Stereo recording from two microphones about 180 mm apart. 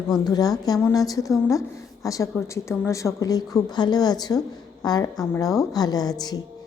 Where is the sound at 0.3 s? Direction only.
20° left (ahead or behind).